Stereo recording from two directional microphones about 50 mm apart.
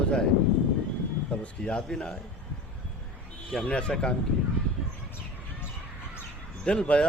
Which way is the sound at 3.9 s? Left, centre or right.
Centre.